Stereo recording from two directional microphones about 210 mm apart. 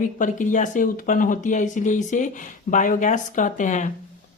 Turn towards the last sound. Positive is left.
turn(degrees=35)  # may be behind; listen again after turning